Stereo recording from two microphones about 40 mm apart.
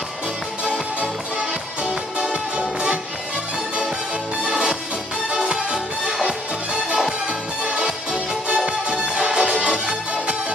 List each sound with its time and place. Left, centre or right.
2.1 s music: centre
4.5 s music: centre
7.2 s music: right
7.8 s music: centre
8.6 s music: right